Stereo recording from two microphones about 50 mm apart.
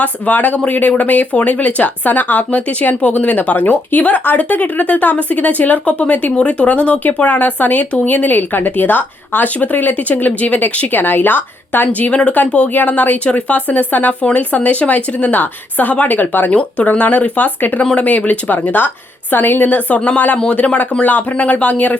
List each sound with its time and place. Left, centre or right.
0.0 s speech: left
11.9 s speech: left